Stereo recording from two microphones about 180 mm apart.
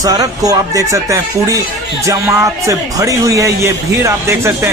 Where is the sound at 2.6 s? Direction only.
20° right (ahead or behind).